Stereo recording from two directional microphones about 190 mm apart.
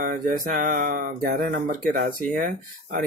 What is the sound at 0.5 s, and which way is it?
Speech, 45° right (ahead or behind).